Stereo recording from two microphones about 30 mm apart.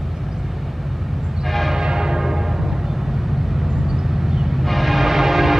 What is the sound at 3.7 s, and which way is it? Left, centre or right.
Vehicle, centre.